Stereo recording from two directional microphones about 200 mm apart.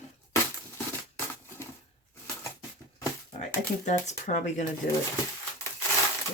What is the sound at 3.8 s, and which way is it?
Speech, 35° left (ahead or behind).